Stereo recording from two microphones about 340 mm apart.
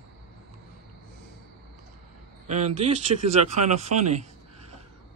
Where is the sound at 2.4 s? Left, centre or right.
Centre.